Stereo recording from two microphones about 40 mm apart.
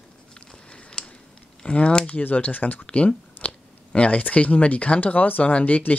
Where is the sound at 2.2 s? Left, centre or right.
Left.